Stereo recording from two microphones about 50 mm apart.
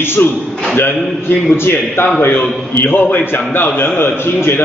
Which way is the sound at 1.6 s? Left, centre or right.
Left.